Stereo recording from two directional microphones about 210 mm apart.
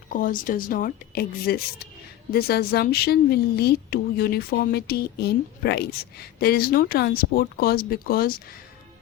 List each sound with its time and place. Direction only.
0.1 s speech: 40° left (ahead or behind)